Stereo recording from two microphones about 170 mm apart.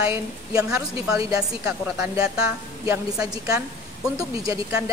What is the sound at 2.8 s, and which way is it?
Speech, 15° right (ahead or behind).